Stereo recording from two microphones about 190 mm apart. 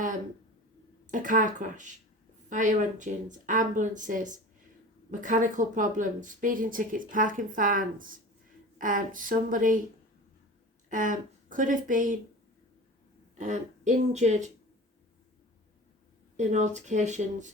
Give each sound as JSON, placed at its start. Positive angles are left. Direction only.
{"t": 1.1, "sound": "speech", "side_deg": -45}
{"t": 10.8, "sound": "speech", "side_deg": -45}
{"t": 13.4, "sound": "speech", "side_deg": -40}
{"t": 16.4, "sound": "speech", "side_deg": -40}